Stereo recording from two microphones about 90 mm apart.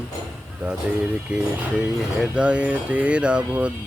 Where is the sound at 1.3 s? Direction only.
15° right (ahead or behind).